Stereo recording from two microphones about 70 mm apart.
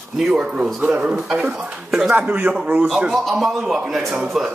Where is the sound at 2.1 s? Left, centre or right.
Right.